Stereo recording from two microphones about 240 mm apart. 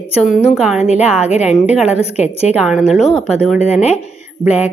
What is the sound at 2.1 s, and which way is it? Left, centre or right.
Speech, left.